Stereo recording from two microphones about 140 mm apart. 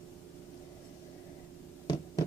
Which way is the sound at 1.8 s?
30° left (ahead or behind).